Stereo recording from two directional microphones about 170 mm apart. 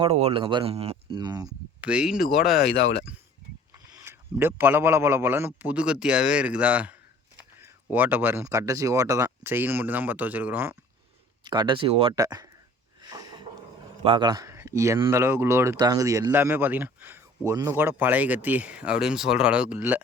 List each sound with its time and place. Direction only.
0.0 s speech: 35° right (ahead or behind)
1.2 s speech: 25° right (ahead or behind)
1.5 s speech: 5° right (ahead or behind)
4.0 s speech: 15° right (ahead or behind)
11.4 s speech: 25° right (ahead or behind)
12.1 s speech: 20° right (ahead or behind)
14.0 s speech: 30° right (ahead or behind); by 20.0 s 10° right (ahead or behind)